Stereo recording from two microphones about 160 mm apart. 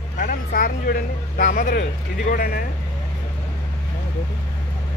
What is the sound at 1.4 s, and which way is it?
Speech, 55° left (ahead or behind).